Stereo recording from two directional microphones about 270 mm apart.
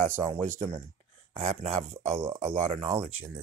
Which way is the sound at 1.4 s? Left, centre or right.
Right.